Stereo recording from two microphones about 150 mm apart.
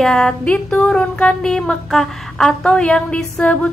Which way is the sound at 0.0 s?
5° left (ahead or behind).